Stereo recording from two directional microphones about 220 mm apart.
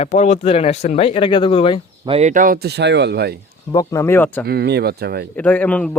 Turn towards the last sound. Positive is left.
turn(degrees=5)  # may be behind; listen again after turning